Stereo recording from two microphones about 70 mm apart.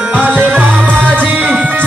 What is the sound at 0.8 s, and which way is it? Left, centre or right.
Music, centre.